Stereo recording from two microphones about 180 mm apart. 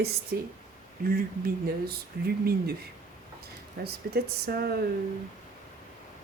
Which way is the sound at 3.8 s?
60° right (ahead or behind).